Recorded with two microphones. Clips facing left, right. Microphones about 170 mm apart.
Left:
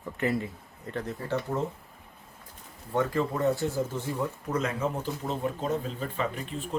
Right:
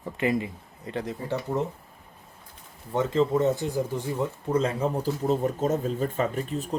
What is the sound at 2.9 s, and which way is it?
Speech, 20° right (ahead or behind).